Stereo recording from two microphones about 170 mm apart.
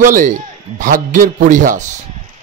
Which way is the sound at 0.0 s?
50° right (ahead or behind).